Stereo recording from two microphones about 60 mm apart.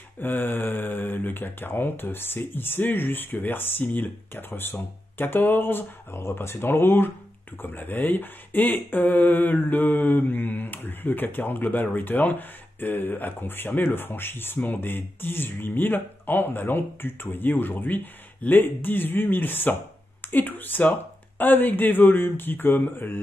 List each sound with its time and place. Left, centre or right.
0.2 s speech: left